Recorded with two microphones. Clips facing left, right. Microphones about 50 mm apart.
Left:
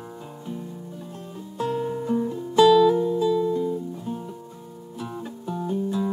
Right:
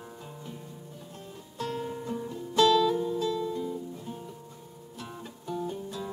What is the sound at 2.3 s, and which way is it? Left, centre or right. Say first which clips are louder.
Music: left 6 dB; centre.